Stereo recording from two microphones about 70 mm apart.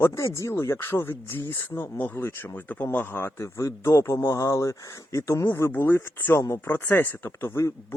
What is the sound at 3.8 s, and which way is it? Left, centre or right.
Speech, left.